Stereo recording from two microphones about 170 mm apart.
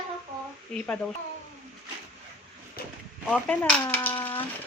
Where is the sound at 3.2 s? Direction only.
10° left (ahead or behind).